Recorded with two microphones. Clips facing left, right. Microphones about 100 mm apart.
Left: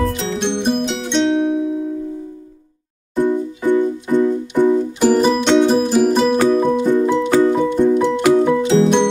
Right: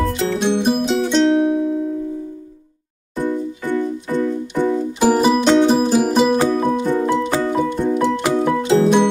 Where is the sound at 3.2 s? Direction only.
15° left (ahead or behind).